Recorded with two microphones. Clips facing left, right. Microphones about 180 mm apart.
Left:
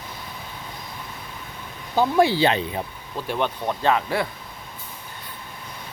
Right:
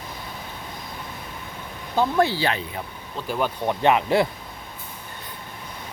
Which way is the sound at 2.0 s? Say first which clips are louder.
Left 3 dB; 10° left (ahead or behind).